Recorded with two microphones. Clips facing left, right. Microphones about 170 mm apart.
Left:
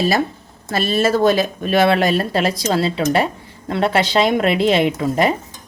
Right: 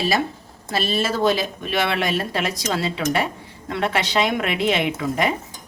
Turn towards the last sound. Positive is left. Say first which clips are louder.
# left 5 dB
turn(degrees=35)  # may be behind; listen again after turning